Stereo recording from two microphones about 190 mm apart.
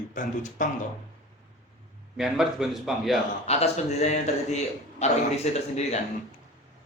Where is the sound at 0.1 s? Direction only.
45° left (ahead or behind).